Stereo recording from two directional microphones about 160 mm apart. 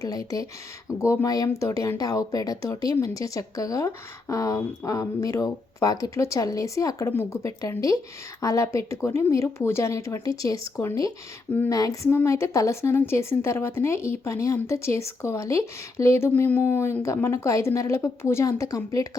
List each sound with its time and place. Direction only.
0.0 s a woman's voice: 20° left (ahead or behind)